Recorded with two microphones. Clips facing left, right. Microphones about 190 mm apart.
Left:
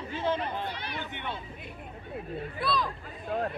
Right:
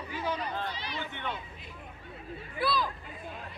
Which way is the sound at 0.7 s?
55° left (ahead or behind).